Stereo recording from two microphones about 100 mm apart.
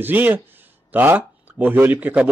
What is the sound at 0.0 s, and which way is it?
Speech, 20° right (ahead or behind).